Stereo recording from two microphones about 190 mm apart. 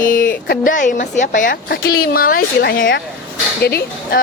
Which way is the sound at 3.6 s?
55° left (ahead or behind).